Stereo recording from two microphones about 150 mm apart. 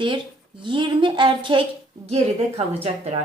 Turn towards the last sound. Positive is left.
turn(degrees=-45)  # may be behind; listen again after turning